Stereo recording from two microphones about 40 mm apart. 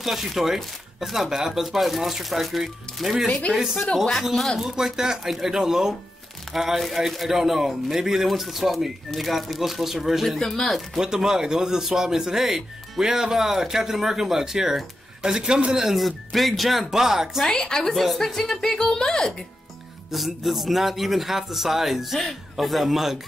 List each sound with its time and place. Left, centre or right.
0.0 s a man's voice: centre
3.5 s a man's voice: right
3.9 s speech: centre
4.2 s a man's voice: centre
10.2 s speech: centre
11.0 s a man's voice: centre
16.0 s a man's voice: centre
17.5 s speech: centre
17.9 s speech: centre
20.1 s a man's voice: centre